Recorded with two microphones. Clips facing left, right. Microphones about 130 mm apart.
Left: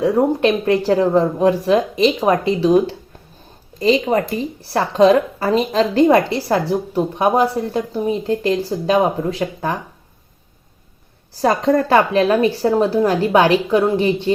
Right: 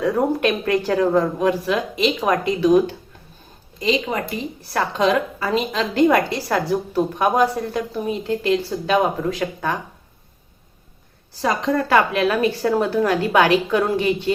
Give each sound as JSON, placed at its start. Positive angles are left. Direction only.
{"t": 0.2, "sound": "a woman's voice", "side_deg": 25}
{"t": 3.8, "sound": "a woman's voice", "side_deg": 35}
{"t": 11.3, "sound": "a woman's voice", "side_deg": 35}